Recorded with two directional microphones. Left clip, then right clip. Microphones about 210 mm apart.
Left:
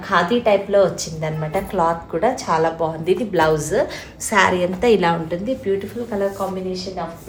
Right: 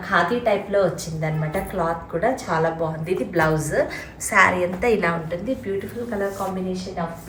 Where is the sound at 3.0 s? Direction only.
45° left (ahead or behind).